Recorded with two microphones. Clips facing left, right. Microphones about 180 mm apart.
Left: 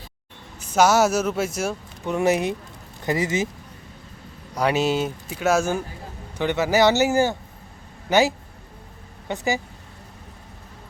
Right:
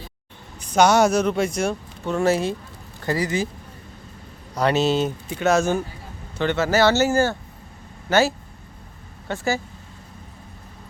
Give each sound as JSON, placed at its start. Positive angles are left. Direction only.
{"t": 0.6, "sound": "speech", "side_deg": 5}
{"t": 2.0, "sound": "speech", "side_deg": 15}
{"t": 4.5, "sound": "speech", "side_deg": 10}